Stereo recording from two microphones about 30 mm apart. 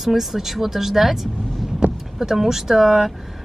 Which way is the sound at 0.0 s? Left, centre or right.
Centre.